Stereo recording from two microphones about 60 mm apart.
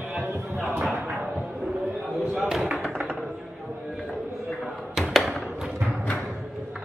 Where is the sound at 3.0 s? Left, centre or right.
Centre.